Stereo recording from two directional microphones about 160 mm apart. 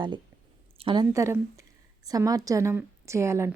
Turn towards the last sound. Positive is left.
turn(degrees=-15)  # may be behind; listen again after turning